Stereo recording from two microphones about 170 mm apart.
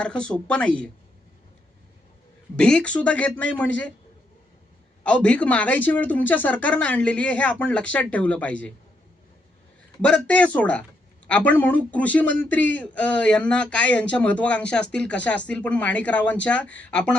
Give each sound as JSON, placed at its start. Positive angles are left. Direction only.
{"t": 0.0, "sound": "speech", "side_deg": 5}
{"t": 2.6, "sound": "a man's voice", "side_deg": 5}
{"t": 5.0, "sound": "a man's voice", "side_deg": 5}
{"t": 10.0, "sound": "a man's voice", "side_deg": 5}